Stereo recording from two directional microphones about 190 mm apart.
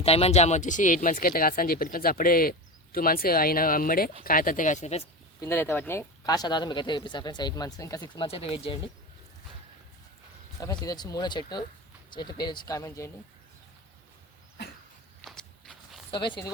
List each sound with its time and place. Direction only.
0.0 s speech: 30° left (ahead or behind)
5.4 s speech: 15° left (ahead or behind); by 8.8 s 30° left (ahead or behind)
10.6 s speech: 20° left (ahead or behind)
15.2 s walk: centre (ahead or behind)
16.1 s speech: 25° left (ahead or behind)